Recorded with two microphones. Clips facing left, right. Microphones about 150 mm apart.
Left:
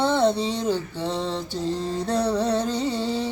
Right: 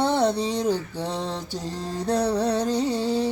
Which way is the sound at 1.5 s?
40° right (ahead or behind).